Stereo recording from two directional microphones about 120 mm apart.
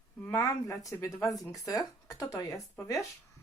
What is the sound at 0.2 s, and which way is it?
Speech, 25° left (ahead or behind).